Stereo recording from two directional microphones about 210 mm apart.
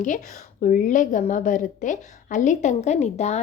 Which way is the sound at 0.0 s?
35° left (ahead or behind).